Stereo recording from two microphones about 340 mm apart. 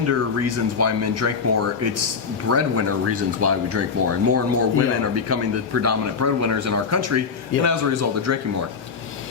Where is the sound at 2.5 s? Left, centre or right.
Right.